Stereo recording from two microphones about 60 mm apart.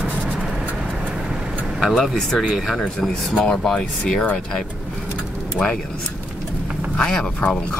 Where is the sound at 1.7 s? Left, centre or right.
Centre.